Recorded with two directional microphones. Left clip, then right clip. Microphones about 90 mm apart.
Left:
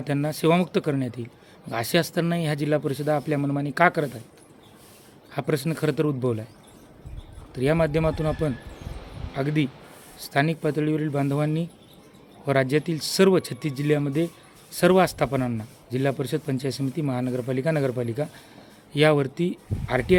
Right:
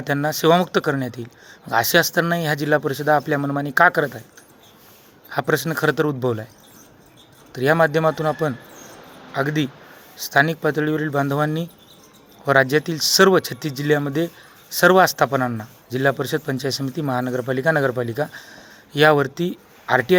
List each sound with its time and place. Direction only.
0.0 s a man's voice: 30° left (ahead or behind)
5.3 s a man's voice: 30° left (ahead or behind)
7.5 s a man's voice: 30° left (ahead or behind)
9.3 s a man's voice: 30° left (ahead or behind)